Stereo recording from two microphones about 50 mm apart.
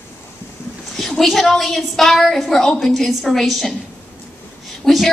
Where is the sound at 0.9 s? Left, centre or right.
Centre.